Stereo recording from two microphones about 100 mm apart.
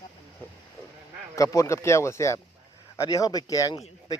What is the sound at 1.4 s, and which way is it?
Speech, 35° left (ahead or behind).